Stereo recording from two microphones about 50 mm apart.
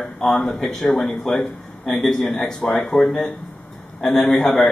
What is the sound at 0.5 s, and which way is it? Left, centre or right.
A man's voice, centre.